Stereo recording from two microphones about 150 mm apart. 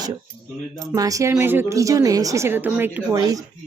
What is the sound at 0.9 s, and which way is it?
A woman's voice, 25° right (ahead or behind).